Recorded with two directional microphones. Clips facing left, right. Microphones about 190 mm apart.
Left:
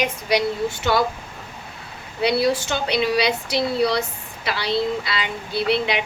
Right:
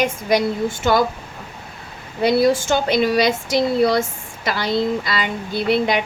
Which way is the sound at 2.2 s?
50° right (ahead or behind).